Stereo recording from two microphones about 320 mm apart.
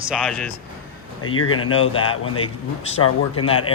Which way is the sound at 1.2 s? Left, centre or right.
Left.